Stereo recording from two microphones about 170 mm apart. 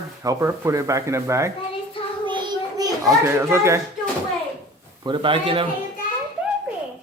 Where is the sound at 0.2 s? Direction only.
20° right (ahead or behind).